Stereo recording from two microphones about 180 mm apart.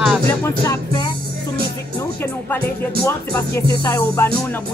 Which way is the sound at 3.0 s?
15° left (ahead or behind).